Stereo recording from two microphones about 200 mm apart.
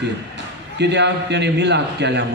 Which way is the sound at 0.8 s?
60° right (ahead or behind).